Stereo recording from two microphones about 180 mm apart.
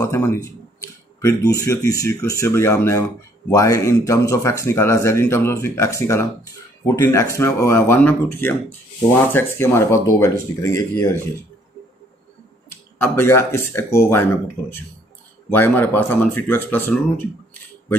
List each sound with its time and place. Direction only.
0.0 s speech: 15° left (ahead or behind)
13.0 s speech: 10° left (ahead or behind)